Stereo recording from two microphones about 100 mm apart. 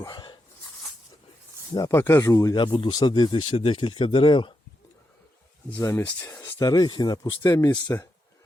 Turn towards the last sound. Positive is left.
turn(degrees=40)  # may be behind; listen again after turning